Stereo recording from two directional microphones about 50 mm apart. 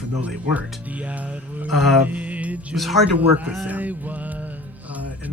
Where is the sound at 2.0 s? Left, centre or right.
Right.